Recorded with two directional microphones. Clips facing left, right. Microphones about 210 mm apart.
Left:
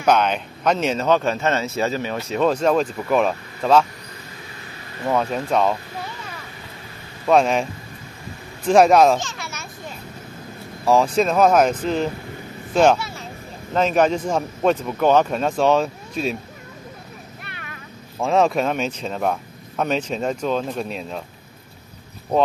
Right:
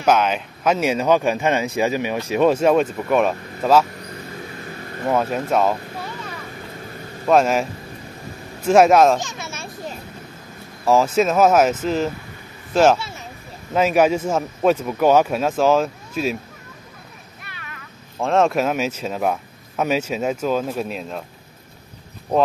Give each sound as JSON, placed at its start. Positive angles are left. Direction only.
{"t": 0.0, "sound": "speech", "side_deg": -5}
{"t": 5.0, "sound": "speech", "side_deg": -5}
{"t": 7.2, "sound": "speech", "side_deg": 0}
{"t": 8.6, "sound": "speech", "side_deg": 0}
{"t": 9.2, "sound": "children playing", "side_deg": -20}
{"t": 10.9, "sound": "speech", "side_deg": 0}
{"t": 18.2, "sound": "speech", "side_deg": 0}